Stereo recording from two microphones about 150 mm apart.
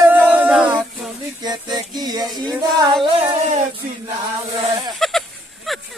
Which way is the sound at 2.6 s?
30° right (ahead or behind).